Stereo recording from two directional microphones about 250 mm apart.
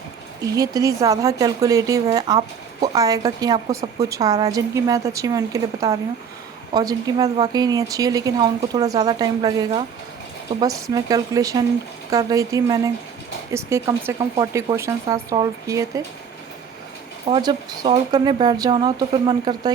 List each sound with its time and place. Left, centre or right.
0.5 s speech: centre
17.2 s speech: centre